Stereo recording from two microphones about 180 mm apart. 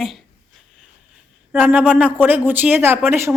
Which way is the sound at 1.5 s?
10° right (ahead or behind).